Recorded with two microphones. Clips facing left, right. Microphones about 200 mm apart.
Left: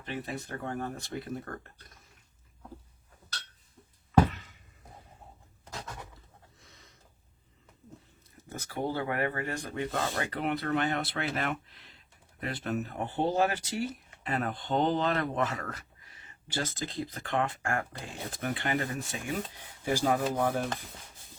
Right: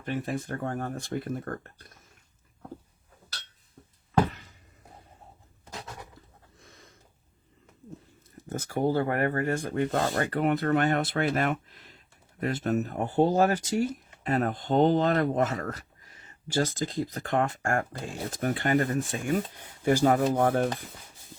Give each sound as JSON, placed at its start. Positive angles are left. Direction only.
{"t": 0.0, "sound": "speech", "side_deg": -50}
{"t": 8.4, "sound": "speech", "side_deg": -50}